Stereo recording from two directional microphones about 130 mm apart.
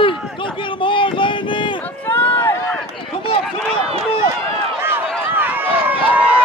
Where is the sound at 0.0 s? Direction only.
40° left (ahead or behind).